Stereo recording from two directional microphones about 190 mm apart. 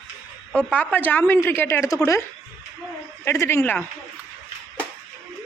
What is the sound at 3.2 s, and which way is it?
Speech, 15° left (ahead or behind).